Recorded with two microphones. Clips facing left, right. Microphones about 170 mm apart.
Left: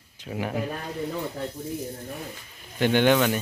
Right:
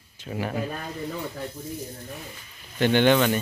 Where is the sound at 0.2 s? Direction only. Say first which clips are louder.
Even; 15° left (ahead or behind).